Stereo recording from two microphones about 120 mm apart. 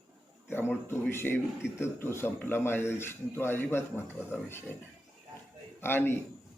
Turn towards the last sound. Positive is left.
turn(degrees=20)  # may be behind; listen again after turning